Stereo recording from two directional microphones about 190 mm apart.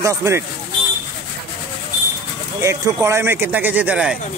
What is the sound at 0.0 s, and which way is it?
Speech, 15° right (ahead or behind).